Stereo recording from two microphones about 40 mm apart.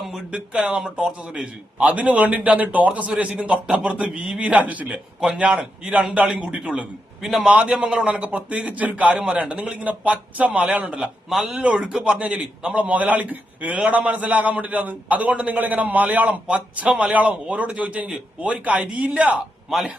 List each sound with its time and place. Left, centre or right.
0.3 s a man's voice: right
7.2 s speech: centre
7.5 s a man's voice: right
7.8 s a man's voice: right
9.0 s speech: right
9.3 s a man's voice: right
11.3 s speech: centre
11.6 s speech: right
12.2 s a man's voice: right
12.9 s a man's voice: right